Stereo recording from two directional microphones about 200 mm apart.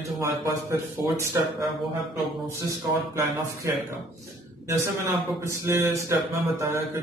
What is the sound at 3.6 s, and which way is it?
Speech, 15° right (ahead or behind).